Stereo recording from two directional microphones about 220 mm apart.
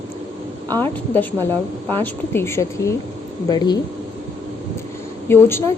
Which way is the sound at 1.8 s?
10° left (ahead or behind).